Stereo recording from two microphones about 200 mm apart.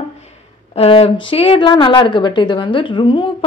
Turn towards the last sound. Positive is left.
turn(degrees=25)  # may be behind; listen again after turning